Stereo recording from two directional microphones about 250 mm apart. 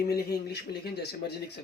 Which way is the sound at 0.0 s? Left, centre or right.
Left.